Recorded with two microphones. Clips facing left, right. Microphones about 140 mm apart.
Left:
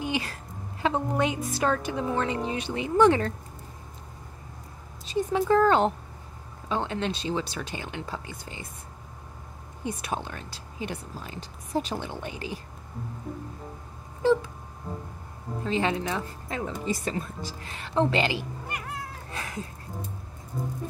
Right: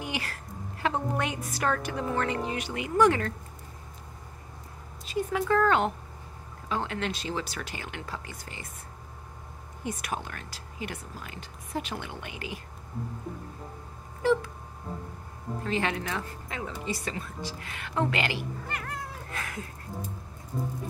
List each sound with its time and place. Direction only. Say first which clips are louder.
0.0 s a sound: left 5 dB; 20° left (ahead or behind)
0.8 s speech: left 3 dB; 20° left (ahead or behind)
5.0 s speech: left 3 dB; 30° left (ahead or behind)
9.8 s speech: left 2 dB; 25° left (ahead or behind)
15.6 s speech: left 3 dB; 20° left (ahead or behind)
16.4 s speech: left 7 dB; 35° left (ahead or behind)
18.7 s cat: even; 10° left (ahead or behind)
19.3 s a sound: left 3 dB; 25° left (ahead or behind)